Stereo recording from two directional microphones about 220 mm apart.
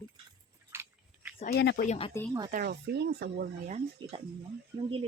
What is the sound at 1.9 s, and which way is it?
Speech, 25° left (ahead or behind).